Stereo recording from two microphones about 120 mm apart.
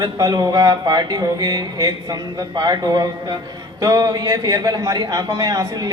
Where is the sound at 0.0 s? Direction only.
35° right (ahead or behind).